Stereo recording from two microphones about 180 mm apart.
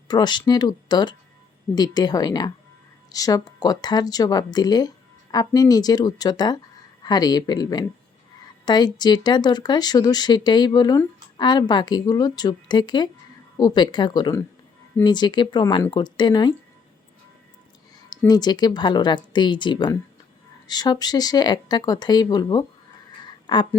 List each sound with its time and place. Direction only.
0.1 s speech: 25° left (ahead or behind)
18.3 s speech: 25° left (ahead or behind)
23.2 s a sound: 25° left (ahead or behind)